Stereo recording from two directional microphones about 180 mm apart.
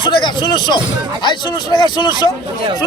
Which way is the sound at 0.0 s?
25° left (ahead or behind).